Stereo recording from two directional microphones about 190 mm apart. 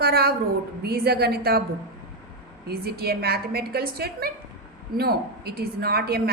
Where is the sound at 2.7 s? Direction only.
55° right (ahead or behind).